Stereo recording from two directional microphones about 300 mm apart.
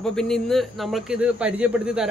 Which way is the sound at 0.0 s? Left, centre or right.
Centre.